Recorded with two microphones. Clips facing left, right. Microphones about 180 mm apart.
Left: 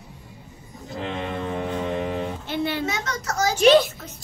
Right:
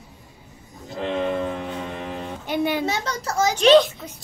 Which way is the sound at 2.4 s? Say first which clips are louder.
Right 6 dB; 15° right (ahead or behind).